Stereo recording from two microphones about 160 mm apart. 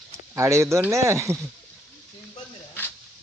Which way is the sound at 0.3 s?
15° right (ahead or behind).